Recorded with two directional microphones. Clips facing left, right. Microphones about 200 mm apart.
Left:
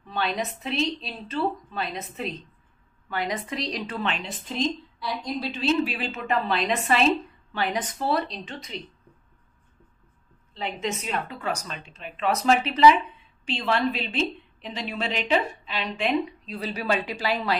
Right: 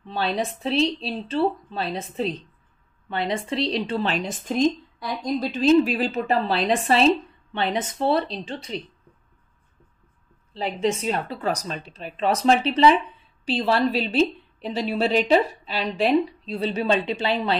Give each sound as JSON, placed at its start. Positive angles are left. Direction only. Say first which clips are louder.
{"t": 0.0, "sound": "a woman's voice", "louder": "right 3 dB", "side_deg": -30}
{"t": 10.5, "sound": "a woman's voice", "louder": "right 6 dB", "side_deg": -35}